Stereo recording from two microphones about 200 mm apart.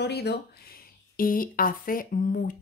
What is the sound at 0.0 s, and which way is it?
Speech, 55° left (ahead or behind).